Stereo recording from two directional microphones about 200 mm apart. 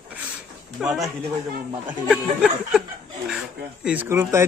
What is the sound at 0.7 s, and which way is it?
Speech, centre (ahead or behind).